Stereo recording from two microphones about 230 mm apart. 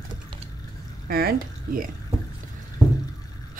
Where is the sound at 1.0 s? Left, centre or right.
Right.